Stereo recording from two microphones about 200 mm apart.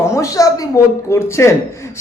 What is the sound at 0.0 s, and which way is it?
Speech, 15° left (ahead or behind).